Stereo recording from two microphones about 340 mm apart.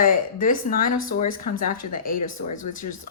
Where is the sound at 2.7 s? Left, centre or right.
Left.